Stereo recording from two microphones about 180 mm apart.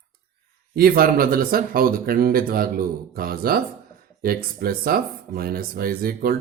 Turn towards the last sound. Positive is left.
turn(degrees=-55)  # may be behind; listen again after turning